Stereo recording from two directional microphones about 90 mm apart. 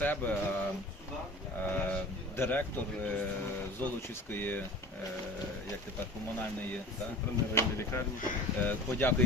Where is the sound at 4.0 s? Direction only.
20° left (ahead or behind).